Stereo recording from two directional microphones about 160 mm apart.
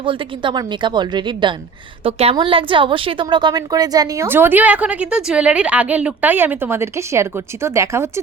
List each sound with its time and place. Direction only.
0.0 s a woman's voice: 30° right (ahead or behind)